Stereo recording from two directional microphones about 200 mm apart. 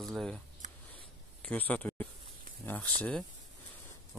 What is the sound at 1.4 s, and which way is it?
Speech, 5° left (ahead or behind).